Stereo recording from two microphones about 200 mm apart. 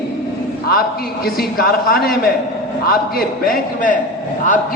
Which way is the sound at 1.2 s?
50° left (ahead or behind).